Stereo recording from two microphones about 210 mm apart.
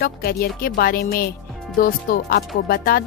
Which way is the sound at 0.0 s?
45° left (ahead or behind).